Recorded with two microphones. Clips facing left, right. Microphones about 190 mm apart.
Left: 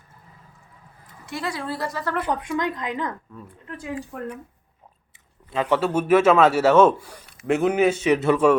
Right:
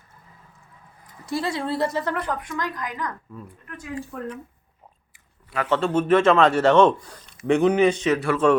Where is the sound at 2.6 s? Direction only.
25° left (ahead or behind).